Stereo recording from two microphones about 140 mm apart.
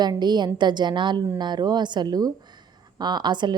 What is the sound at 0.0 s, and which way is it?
A woman's voice, 30° right (ahead or behind).